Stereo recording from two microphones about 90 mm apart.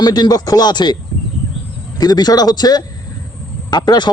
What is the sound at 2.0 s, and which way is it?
A man's voice, 50° left (ahead or behind).